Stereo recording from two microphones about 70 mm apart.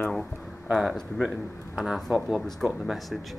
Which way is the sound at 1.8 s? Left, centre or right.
Centre.